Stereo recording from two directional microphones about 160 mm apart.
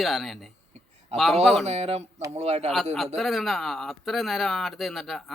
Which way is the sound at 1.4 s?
Centre (ahead or behind).